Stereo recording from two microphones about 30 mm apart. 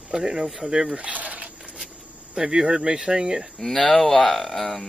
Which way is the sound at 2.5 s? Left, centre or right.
Right.